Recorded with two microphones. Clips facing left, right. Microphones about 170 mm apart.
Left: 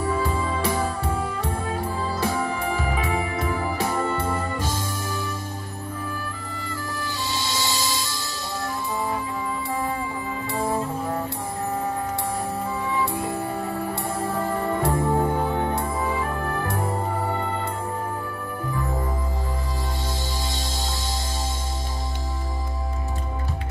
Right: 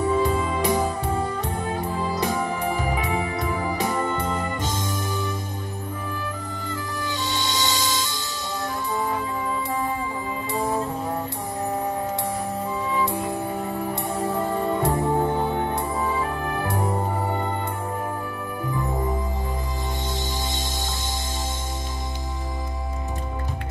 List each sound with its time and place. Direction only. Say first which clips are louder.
0.0 s music: right 3 dB; 20° right (ahead or behind)
7.0 s music: right 3 dB; 20° right (ahead or behind)
10.5 s music: even; 20° right (ahead or behind)
14.0 s music: right 2 dB; 20° right (ahead or behind)